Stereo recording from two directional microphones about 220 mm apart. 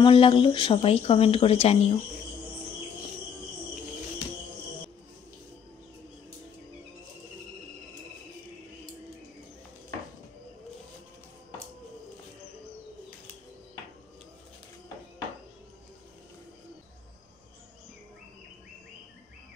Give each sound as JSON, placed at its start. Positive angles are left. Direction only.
{"t": 0.0, "sound": "speech", "side_deg": 25}